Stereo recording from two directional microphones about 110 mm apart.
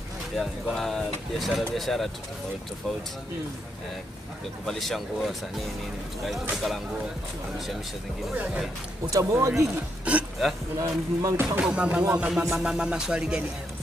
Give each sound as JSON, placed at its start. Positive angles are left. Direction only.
{"t": 0.4, "sound": "speech", "side_deg": 0}
{"t": 4.6, "sound": "speech", "side_deg": 0}
{"t": 6.5, "sound": "speech", "side_deg": 0}
{"t": 8.4, "sound": "music", "side_deg": -10}
{"t": 9.1, "sound": "speech", "side_deg": -25}
{"t": 10.8, "sound": "speech", "side_deg": -30}
{"t": 11.5, "sound": "music", "side_deg": -10}